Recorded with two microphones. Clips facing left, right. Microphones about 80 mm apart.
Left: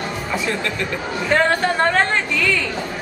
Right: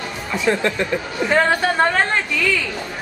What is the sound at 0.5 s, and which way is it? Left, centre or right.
Speech, right.